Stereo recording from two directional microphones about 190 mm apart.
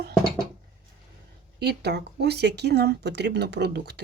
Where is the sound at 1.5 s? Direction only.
60° right (ahead or behind).